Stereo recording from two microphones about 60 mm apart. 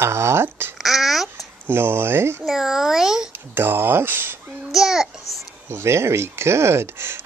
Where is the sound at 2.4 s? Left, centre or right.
Centre.